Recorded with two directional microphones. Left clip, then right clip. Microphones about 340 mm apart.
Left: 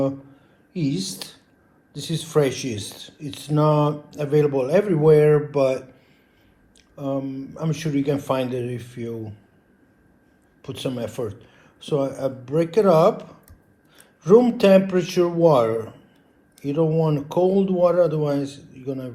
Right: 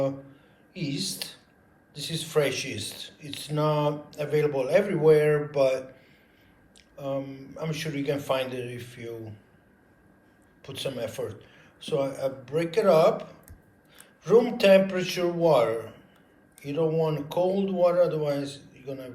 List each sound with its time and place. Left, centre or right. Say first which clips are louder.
0.7 s a man's voice: left 5 dB; centre
6.9 s a man's voice: left 5 dB; centre
10.6 s a man's voice: left 4 dB; centre